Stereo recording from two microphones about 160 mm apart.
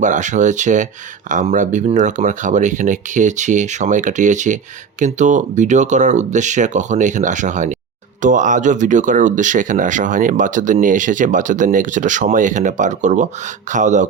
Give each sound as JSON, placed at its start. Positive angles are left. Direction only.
{"t": 0.0, "sound": "speech", "side_deg": -50}